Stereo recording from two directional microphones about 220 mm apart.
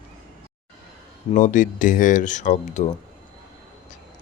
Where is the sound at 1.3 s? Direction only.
35° left (ahead or behind).